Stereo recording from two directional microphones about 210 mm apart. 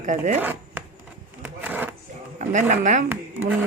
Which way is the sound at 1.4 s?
10° right (ahead or behind).